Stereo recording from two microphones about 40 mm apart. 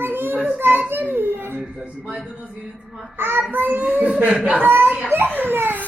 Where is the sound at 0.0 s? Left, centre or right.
Right.